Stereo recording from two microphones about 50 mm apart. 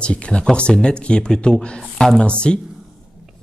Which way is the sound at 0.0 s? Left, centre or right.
Left.